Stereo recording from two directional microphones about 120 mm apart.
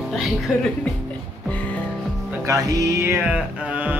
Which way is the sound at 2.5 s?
25° right (ahead or behind).